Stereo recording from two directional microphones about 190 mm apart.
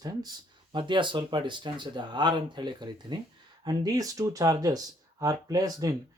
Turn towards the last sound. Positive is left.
turn(degrees=-20)  # may be behind; listen again after turning